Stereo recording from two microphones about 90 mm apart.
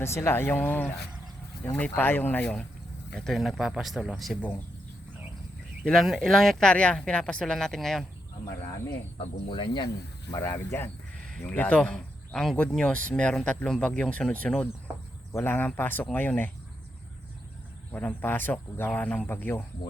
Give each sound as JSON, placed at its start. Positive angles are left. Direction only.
{"t": 0.0, "sound": "speech", "side_deg": 30}
{"t": 5.8, "sound": "speech", "side_deg": 0}
{"t": 9.1, "sound": "speech", "side_deg": 65}
{"t": 10.5, "sound": "speech", "side_deg": 25}
{"t": 11.3, "sound": "speech", "side_deg": 10}
{"t": 17.9, "sound": "speech", "side_deg": 20}